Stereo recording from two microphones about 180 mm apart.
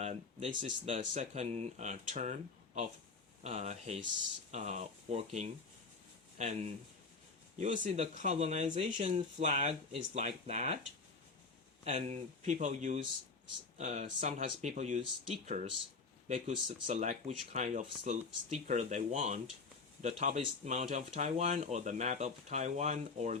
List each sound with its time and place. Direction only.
0.0 s speech: 35° right (ahead or behind)
11.9 s speech: 40° right (ahead or behind)
16.3 s speech: 40° right (ahead or behind)